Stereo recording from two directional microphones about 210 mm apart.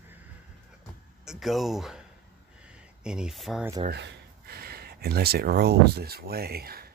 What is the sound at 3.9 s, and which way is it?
Speech, 50° right (ahead or behind).